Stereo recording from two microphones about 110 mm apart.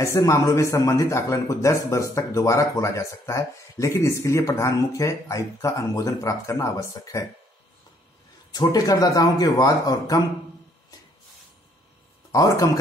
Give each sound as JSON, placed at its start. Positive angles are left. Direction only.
{"t": 0.0, "sound": "a man's voice", "side_deg": 25}
{"t": 8.5, "sound": "a man's voice", "side_deg": 35}
{"t": 12.3, "sound": "speech", "side_deg": 30}